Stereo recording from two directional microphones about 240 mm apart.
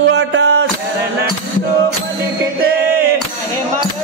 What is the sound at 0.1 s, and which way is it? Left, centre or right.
Music, right.